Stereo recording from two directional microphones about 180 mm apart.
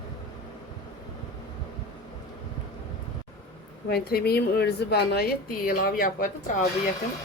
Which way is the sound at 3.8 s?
60° left (ahead or behind).